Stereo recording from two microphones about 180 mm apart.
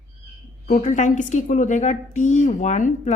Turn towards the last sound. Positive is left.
turn(degrees=45)  # may be behind; listen again after turning